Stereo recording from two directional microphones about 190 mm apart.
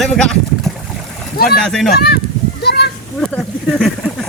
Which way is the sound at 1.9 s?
55° left (ahead or behind).